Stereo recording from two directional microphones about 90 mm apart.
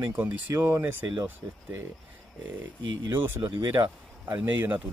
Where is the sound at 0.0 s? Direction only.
20° right (ahead or behind).